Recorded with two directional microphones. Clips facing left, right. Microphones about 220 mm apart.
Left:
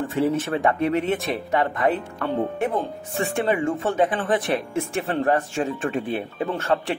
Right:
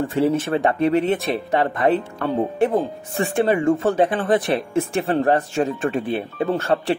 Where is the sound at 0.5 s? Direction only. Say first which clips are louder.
Right 3 dB; 30° right (ahead or behind).